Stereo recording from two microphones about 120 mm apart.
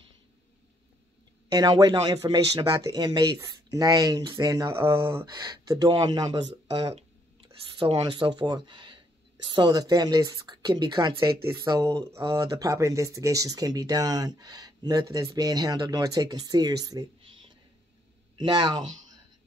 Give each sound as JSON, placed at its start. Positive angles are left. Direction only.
{"t": 1.5, "sound": "speech", "side_deg": -35}
{"t": 5.2, "sound": "speech", "side_deg": -35}
{"t": 7.9, "sound": "a woman's voice", "side_deg": -45}
{"t": 18.4, "sound": "speech", "side_deg": -35}